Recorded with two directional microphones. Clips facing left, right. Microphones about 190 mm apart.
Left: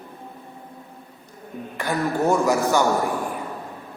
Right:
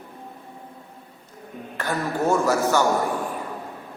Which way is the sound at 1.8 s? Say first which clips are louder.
Left 2 dB; 15° left (ahead or behind).